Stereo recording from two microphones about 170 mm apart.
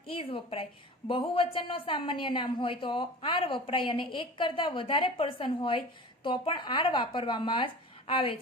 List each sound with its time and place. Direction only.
0.1 s a woman's voice: 30° left (ahead or behind)